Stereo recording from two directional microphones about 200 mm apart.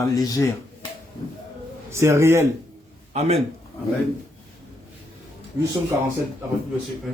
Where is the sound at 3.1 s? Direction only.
30° right (ahead or behind).